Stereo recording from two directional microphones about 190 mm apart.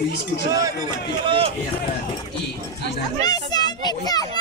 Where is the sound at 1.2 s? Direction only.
30° right (ahead or behind).